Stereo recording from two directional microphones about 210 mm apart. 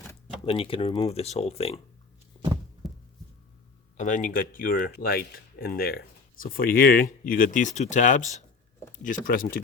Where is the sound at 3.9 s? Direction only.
35° left (ahead or behind).